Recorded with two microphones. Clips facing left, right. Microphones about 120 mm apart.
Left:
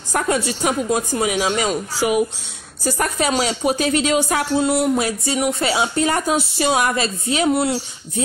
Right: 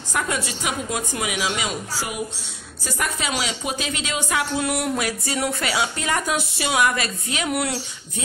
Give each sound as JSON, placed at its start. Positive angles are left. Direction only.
{"t": 0.1, "sound": "speech", "side_deg": 40}
{"t": 2.0, "sound": "a woman's voice", "side_deg": 70}
{"t": 2.8, "sound": "speech", "side_deg": 40}
{"t": 4.6, "sound": "speech", "side_deg": 25}